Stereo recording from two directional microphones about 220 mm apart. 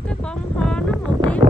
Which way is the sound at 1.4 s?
35° right (ahead or behind).